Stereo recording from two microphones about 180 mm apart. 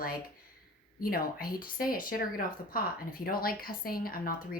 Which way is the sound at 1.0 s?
55° left (ahead or behind).